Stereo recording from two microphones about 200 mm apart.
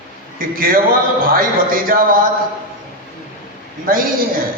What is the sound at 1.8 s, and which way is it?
Speech, 45° right (ahead or behind).